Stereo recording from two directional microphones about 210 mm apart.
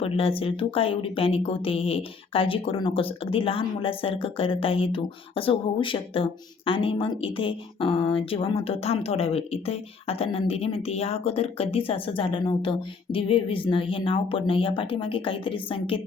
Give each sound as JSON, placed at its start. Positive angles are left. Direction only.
{"t": 0.0, "sound": "speech", "side_deg": 25}